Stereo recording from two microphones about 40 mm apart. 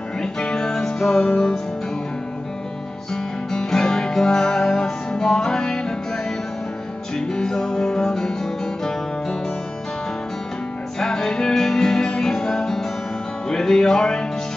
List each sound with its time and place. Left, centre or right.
0.2 s music: centre
3.5 s music: centre
7.2 s music: centre
11.0 s music: centre
13.5 s speech: centre